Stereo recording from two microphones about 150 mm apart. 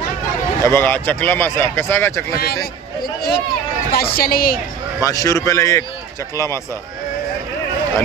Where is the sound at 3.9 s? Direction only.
90° left.